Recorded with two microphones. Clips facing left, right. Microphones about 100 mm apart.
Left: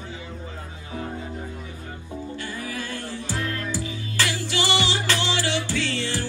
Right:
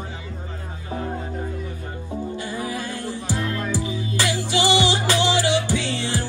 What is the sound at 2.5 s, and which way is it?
Music, 20° right (ahead or behind).